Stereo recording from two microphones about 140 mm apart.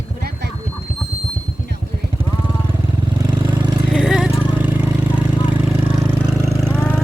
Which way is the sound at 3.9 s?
5° right (ahead or behind).